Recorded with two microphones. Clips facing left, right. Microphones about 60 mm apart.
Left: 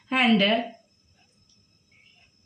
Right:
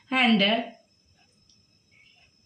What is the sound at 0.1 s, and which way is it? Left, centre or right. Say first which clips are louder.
Speech: left 1 dB; centre.